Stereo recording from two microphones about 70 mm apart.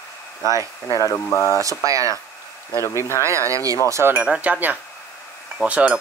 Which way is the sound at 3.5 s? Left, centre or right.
Right.